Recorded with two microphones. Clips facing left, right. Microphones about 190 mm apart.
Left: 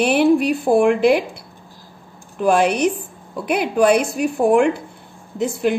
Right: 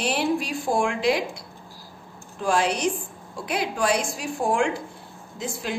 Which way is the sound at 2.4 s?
60° left (ahead or behind).